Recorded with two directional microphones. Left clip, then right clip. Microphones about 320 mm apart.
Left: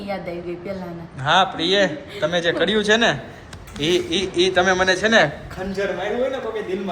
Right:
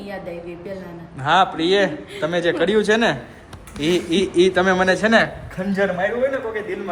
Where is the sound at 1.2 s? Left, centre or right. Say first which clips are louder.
Right 1 dB; centre.